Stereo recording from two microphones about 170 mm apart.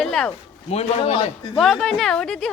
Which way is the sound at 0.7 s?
40° left (ahead or behind).